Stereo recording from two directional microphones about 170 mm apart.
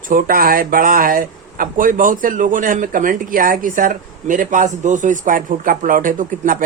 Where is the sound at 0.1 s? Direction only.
55° right (ahead or behind).